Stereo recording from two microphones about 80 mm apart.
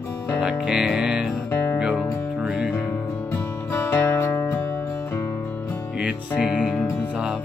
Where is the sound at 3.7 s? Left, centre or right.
Left.